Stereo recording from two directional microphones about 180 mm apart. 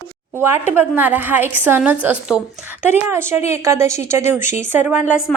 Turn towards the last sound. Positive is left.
turn(degrees=-5)  # may be behind; listen again after turning